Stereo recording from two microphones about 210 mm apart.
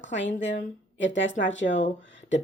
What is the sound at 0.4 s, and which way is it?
Speech, 60° left (ahead or behind).